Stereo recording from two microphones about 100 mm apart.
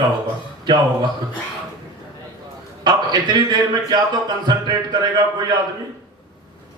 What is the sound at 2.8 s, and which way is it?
A man's voice, 45° right (ahead or behind).